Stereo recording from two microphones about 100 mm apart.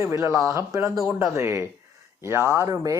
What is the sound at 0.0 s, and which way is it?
Speech, 25° right (ahead or behind).